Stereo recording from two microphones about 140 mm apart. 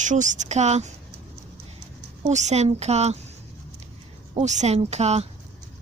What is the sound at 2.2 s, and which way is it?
Speech, 55° right (ahead or behind).